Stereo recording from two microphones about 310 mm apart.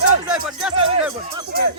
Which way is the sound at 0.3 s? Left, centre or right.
Centre.